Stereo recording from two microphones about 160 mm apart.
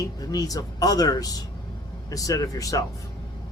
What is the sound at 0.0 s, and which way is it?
Speech, 25° left (ahead or behind).